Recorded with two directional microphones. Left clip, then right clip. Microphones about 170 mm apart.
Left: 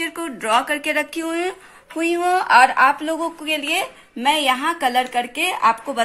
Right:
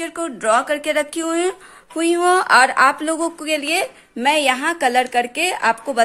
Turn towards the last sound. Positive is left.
turn(degrees=-40)  # may be behind; listen again after turning